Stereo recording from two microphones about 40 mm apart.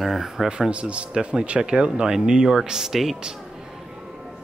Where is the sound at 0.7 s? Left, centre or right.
Right.